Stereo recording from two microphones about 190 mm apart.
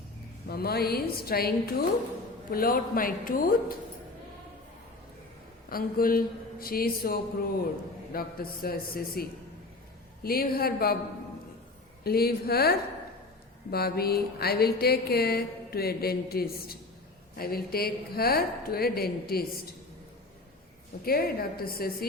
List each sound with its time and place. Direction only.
0.4 s a woman's voice: 55° left (ahead or behind)
5.6 s a woman's voice: 50° left (ahead or behind)
10.2 s a woman's voice: 50° left (ahead or behind)
12.0 s a sound: 55° left (ahead or behind)
17.3 s a woman's voice: 55° left (ahead or behind)
21.0 s a woman's voice: 50° left (ahead or behind)